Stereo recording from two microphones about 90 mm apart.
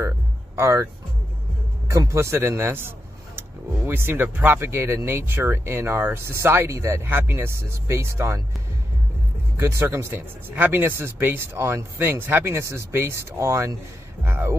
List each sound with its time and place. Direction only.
0.6 s speech: 30° right (ahead or behind)
1.9 s speech: 30° right (ahead or behind)
9.6 s speech: 30° right (ahead or behind)